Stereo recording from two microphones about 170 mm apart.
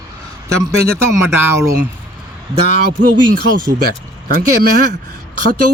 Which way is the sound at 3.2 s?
55° right (ahead or behind).